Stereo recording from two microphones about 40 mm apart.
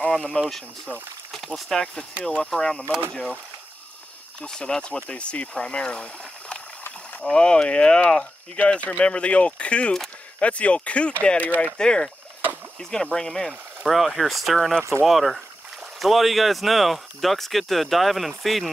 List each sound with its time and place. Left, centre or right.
0.3 s speech: left
4.4 s speech: left
7.2 s speech: left
11.8 s speech: left
13.5 s speech: centre